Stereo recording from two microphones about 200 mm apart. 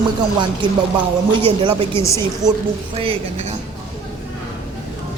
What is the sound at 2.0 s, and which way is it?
Speech, 15° left (ahead or behind).